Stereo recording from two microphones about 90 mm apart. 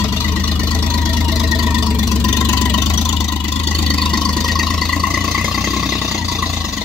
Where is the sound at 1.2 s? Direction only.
5° right (ahead or behind).